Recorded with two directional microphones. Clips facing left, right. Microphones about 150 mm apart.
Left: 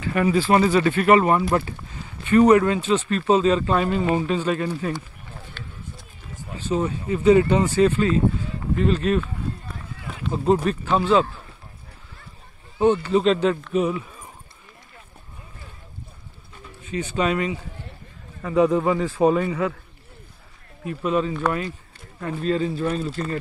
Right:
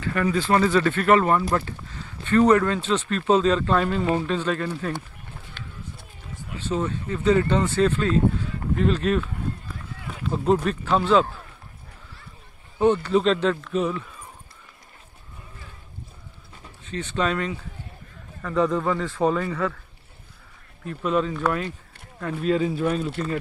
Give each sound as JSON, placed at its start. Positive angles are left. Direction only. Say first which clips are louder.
{"t": 0.1, "sound": "speech", "louder": "left 3 dB", "side_deg": 15}
{"t": 5.6, "sound": "run", "louder": "right 1 dB", "side_deg": -20}
{"t": 6.7, "sound": "speech", "louder": "left 3 dB", "side_deg": 10}
{"t": 10.3, "sound": "speech", "louder": "left 1 dB", "side_deg": 5}
{"t": 12.7, "sound": "speech", "louder": "left 1 dB", "side_deg": 5}
{"t": 16.8, "sound": "speech", "louder": "left 2 dB", "side_deg": 10}
{"t": 20.8, "sound": "speech", "louder": "left 1 dB", "side_deg": 5}